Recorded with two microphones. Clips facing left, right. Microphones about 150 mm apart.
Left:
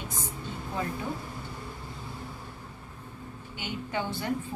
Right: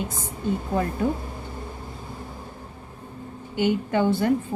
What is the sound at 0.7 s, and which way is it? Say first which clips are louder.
Speech: right 7 dB; 50° right (ahead or behind).